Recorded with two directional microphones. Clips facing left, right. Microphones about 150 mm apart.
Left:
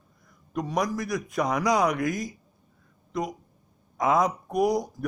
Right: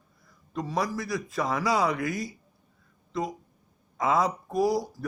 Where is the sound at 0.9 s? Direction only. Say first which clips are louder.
Left 2 dB; 20° left (ahead or behind).